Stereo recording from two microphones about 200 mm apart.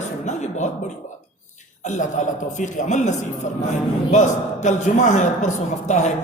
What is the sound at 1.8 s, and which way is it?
A man's voice, 35° left (ahead or behind).